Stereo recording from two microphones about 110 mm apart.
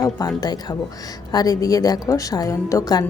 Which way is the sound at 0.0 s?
35° left (ahead or behind).